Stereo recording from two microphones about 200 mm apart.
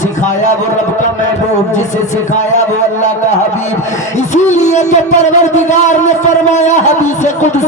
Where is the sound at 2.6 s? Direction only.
35° left (ahead or behind).